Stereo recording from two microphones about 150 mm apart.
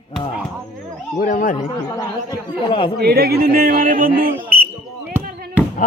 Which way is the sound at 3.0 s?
90° right.